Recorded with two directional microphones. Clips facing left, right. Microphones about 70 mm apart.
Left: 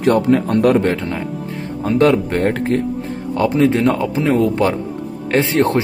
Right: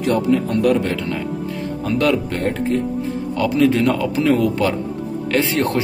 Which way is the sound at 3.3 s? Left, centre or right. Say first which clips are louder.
Left 2 dB; left.